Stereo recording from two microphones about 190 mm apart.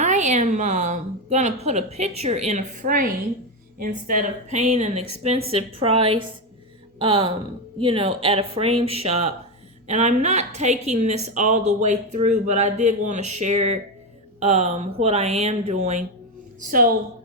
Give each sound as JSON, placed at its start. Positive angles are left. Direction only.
{"t": 0.0, "sound": "a woman's voice", "side_deg": -40}